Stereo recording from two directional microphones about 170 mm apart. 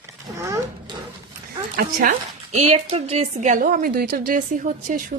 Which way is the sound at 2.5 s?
40° right (ahead or behind).